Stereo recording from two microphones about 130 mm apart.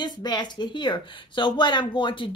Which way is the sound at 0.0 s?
35° left (ahead or behind).